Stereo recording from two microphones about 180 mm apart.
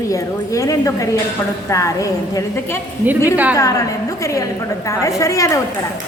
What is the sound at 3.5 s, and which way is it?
A woman's voice, 20° left (ahead or behind).